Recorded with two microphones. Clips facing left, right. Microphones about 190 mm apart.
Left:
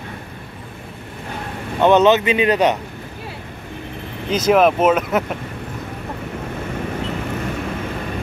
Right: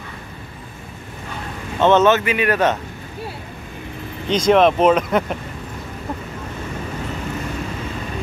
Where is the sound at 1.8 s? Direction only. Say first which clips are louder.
Left 1 dB; 15° left (ahead or behind).